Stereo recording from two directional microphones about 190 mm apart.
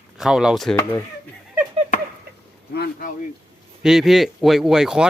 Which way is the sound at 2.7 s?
55° left (ahead or behind).